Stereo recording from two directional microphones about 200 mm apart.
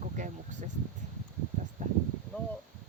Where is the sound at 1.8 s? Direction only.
40° right (ahead or behind).